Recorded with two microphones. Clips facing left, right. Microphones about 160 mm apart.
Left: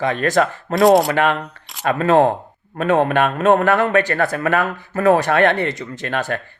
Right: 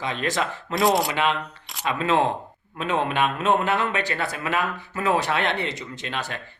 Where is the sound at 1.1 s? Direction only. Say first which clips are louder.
Left 6 dB; 50° left (ahead or behind).